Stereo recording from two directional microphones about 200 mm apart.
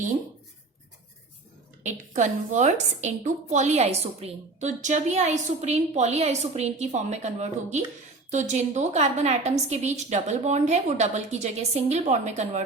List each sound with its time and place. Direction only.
1.8 s a woman's voice: 35° right (ahead or behind)